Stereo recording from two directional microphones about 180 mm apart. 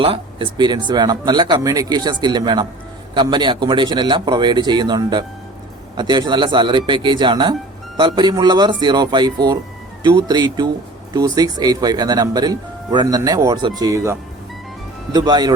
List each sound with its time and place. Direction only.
0.0 s speech: 30° right (ahead or behind)